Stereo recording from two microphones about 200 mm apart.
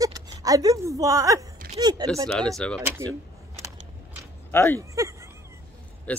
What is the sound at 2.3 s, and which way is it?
Speech, centre (ahead or behind).